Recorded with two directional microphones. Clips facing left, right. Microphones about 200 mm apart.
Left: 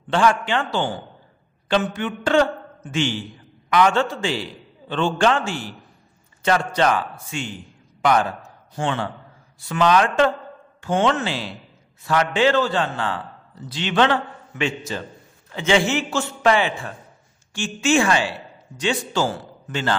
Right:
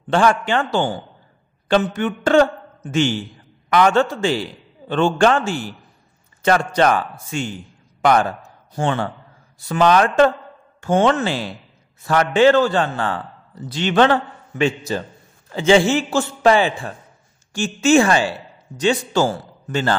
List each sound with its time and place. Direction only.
0.1 s a man's voice: 45° right (ahead or behind)